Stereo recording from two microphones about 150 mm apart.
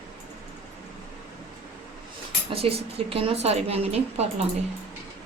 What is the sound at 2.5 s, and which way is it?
A woman's voice, 40° right (ahead or behind).